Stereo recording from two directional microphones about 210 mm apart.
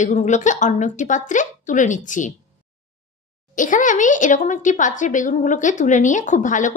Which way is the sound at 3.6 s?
40° left (ahead or behind).